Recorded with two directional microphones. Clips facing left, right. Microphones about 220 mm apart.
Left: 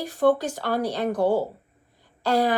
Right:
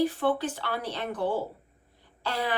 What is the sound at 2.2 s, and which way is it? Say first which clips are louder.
Throat clearing: left 9 dB; 40° left (ahead or behind).